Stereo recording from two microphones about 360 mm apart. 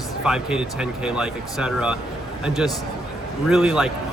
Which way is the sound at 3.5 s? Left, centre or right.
Centre.